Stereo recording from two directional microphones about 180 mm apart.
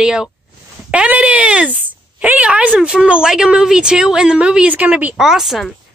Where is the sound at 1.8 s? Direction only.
10° right (ahead or behind).